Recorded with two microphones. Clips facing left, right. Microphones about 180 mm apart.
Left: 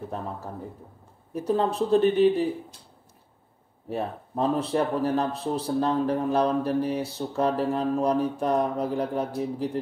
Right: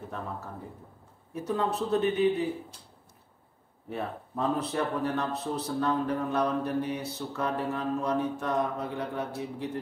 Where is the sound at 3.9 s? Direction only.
35° left (ahead or behind).